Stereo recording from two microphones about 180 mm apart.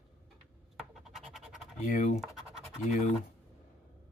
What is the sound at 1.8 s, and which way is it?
Speech, 45° left (ahead or behind).